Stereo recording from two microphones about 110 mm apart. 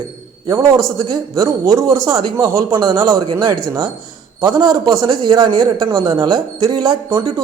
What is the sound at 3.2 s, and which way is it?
A man's voice, 45° right (ahead or behind).